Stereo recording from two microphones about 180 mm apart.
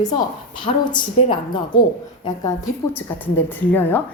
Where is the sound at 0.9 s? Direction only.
25° left (ahead or behind).